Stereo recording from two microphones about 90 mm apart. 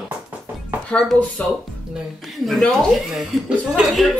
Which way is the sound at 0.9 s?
10° left (ahead or behind).